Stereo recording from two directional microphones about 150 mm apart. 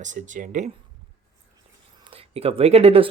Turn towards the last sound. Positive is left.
turn(degrees=-40)  # may be behind; listen again after turning